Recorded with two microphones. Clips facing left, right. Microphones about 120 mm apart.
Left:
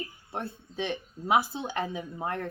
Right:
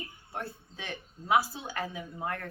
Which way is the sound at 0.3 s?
20° left (ahead or behind).